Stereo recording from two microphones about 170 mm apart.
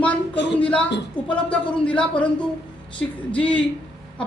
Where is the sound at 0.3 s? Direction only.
90° left.